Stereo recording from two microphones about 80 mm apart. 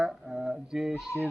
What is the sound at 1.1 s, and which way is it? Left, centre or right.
Speech, left.